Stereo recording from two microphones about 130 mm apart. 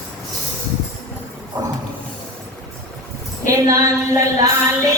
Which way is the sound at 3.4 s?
25° right (ahead or behind).